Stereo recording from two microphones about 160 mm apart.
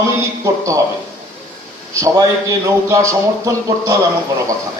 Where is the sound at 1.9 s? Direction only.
20° right (ahead or behind).